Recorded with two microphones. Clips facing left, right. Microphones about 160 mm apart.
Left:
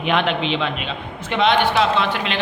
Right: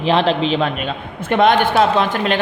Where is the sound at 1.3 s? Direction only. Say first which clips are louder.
Right 4 dB; 50° right (ahead or behind).